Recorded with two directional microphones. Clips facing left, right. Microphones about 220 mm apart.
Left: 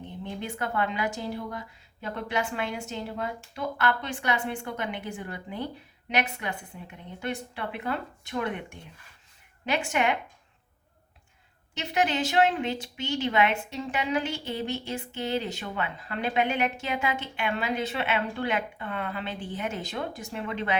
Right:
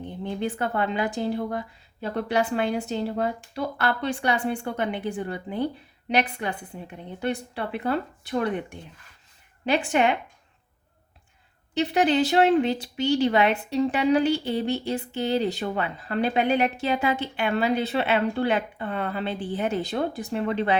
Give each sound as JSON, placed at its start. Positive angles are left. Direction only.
{"t": 0.3, "sound": "speech", "side_deg": -35}
{"t": 11.7, "sound": "speech", "side_deg": -35}